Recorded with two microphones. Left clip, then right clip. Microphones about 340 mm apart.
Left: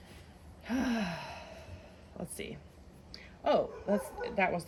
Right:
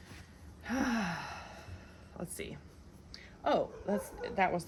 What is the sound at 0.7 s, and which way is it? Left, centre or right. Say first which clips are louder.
Sigh: even; centre.